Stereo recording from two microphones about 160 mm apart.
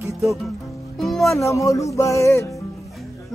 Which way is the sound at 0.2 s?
Centre (ahead or behind).